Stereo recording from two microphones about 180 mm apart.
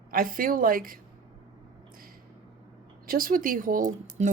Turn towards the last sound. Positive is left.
turn(degrees=-50)  # may be behind; listen again after turning